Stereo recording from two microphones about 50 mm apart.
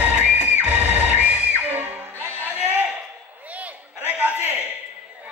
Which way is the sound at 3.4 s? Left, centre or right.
Right.